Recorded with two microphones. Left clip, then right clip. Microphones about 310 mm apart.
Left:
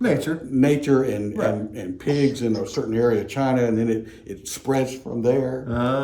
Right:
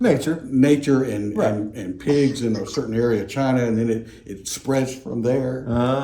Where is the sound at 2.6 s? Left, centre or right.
Centre.